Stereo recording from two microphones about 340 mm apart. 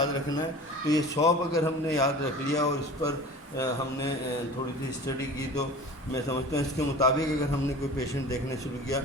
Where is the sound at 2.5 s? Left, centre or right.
Centre.